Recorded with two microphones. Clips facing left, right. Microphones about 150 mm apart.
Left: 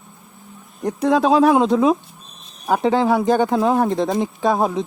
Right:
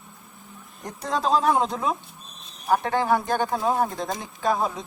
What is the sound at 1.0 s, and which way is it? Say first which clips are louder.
Speech: left 8 dB; 70° left (ahead or behind).